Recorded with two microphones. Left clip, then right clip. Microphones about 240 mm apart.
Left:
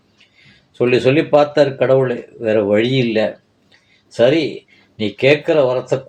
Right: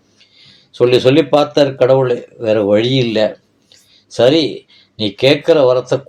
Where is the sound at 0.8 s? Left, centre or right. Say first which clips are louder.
Right 4 dB; right.